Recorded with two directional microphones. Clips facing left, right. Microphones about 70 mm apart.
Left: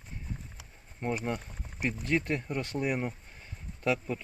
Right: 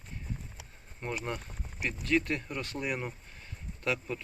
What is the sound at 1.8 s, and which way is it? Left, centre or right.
Speech, left.